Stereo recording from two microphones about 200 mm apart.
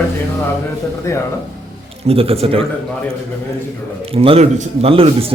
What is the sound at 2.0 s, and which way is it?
Speech, 30° right (ahead or behind).